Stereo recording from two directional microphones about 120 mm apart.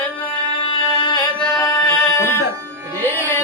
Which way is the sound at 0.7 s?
35° left (ahead or behind).